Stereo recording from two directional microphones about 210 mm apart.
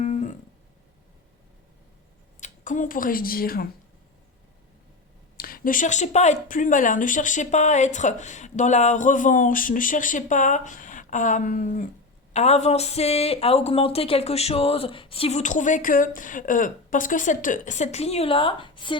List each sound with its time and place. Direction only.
0.0 s music: 35° left (ahead or behind)
2.4 s speech: 40° left (ahead or behind)
5.4 s speech: 45° left (ahead or behind); by 18.9 s 25° left (ahead or behind)